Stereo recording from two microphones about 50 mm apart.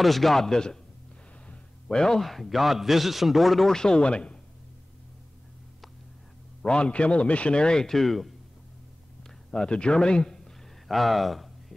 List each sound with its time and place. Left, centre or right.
0.0 s a man's voice: centre
3.7 s a man's voice: centre
6.6 s a man's voice: centre
9.5 s speech: centre
10.9 s a man's voice: centre